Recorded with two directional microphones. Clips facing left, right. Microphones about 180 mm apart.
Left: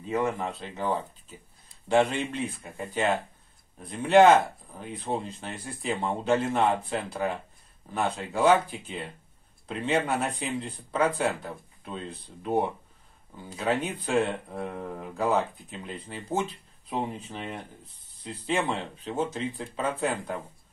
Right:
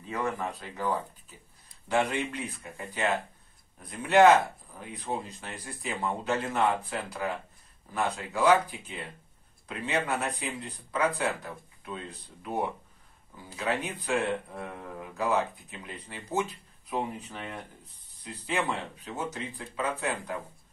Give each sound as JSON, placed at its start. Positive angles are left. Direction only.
{"t": 0.1, "sound": "speech", "side_deg": 25}
{"t": 13.7, "sound": "speech", "side_deg": 25}